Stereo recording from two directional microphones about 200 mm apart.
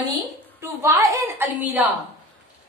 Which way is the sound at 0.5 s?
15° right (ahead or behind).